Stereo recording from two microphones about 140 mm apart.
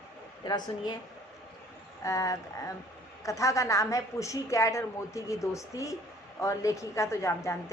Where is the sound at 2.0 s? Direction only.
20° left (ahead or behind).